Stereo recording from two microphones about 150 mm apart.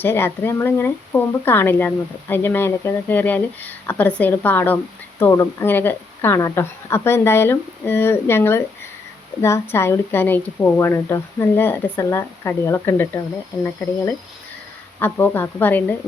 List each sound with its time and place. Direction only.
0.0 s speech: 15° left (ahead or behind)
14.9 s speech: 15° left (ahead or behind)